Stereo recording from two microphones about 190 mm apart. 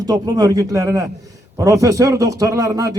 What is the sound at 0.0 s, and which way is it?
A man's voice, 20° right (ahead or behind).